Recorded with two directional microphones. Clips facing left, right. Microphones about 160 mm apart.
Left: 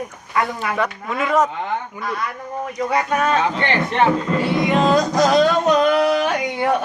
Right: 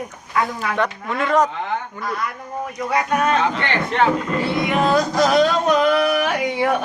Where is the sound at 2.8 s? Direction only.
Centre (ahead or behind).